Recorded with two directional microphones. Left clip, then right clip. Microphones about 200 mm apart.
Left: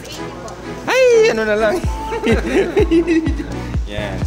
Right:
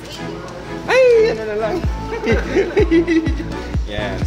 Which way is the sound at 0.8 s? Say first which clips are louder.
Even; 50° left (ahead or behind).